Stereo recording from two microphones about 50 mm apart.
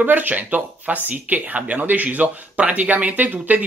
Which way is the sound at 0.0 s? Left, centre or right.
Right.